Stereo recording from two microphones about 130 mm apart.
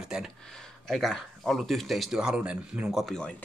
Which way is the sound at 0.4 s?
5° left (ahead or behind).